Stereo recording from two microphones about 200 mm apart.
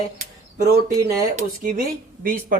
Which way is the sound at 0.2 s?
35° right (ahead or behind).